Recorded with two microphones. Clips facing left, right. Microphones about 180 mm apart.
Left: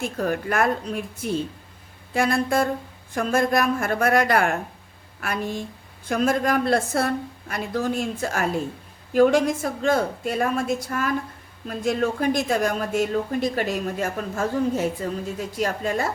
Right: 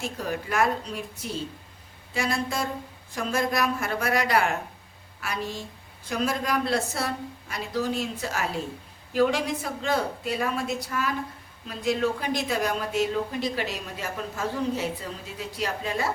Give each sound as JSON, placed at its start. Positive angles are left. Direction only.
{"t": 0.0, "sound": "a woman's voice", "side_deg": 55}
{"t": 2.1, "sound": "a sound", "side_deg": 55}
{"t": 3.2, "sound": "a woman's voice", "side_deg": 55}